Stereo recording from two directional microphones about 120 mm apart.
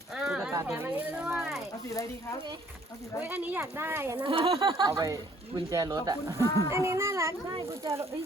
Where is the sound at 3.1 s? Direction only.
15° right (ahead or behind).